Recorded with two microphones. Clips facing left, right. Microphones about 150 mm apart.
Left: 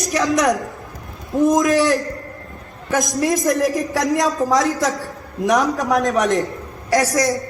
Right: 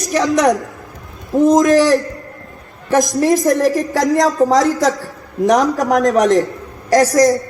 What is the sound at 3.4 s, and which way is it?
A woman's voice, 30° right (ahead or behind).